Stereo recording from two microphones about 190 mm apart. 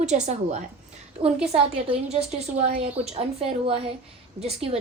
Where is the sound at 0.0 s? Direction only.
40° right (ahead or behind).